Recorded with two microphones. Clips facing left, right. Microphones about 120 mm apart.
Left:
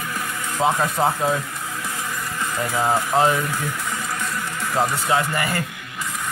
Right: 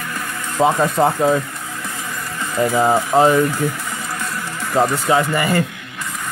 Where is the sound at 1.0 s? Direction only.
5° right (ahead or behind).